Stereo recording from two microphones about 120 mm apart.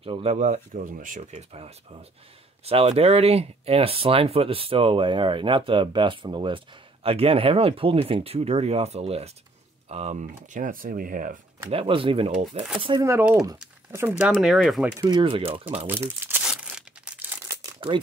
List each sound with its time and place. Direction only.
0.0 s speech: 50° right (ahead or behind); by 11.3 s 90° right
11.7 s speech: 50° right (ahead or behind)
12.3 s speech: 75° right (ahead or behind)
12.9 s speech: 40° right (ahead or behind)
14.2 s speech: centre (ahead or behind)
15.0 s speech: 35° right (ahead or behind)
15.2 s speech: 50° right (ahead or behind)
15.9 s speech: 20° right (ahead or behind)
16.4 s tearing: 5° right (ahead or behind)
17.7 s speech: 45° right (ahead or behind)